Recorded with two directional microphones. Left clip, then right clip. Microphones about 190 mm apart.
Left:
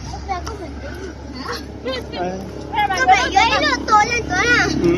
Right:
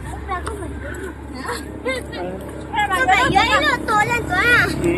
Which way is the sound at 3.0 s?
70° right (ahead or behind).